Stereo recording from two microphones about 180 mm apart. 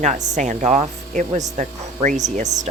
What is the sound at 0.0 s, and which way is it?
Speech, 40° right (ahead or behind).